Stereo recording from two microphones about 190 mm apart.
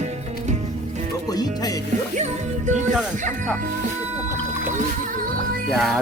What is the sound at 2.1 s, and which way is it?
Music, 40° right (ahead or behind).